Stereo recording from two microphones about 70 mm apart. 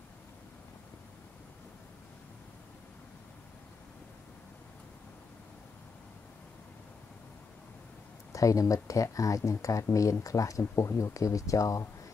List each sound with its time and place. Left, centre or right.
8.3 s speech: left
10.6 s speech: left